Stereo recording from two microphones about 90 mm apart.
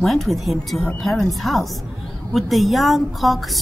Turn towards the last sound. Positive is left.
turn(degrees=0)  # may be behind; listen again after turning